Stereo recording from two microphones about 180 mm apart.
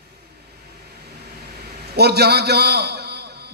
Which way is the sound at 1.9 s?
65° right (ahead or behind).